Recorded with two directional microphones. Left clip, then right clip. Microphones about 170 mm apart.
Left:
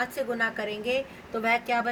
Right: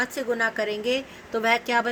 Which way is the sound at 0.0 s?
60° right (ahead or behind).